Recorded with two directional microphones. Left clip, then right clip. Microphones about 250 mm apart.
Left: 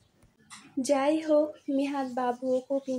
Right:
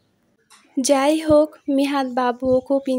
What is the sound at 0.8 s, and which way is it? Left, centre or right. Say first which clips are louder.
A woman's voice: right 9 dB; right.